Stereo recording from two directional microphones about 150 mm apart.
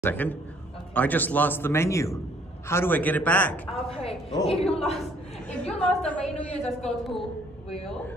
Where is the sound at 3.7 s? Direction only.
40° left (ahead or behind).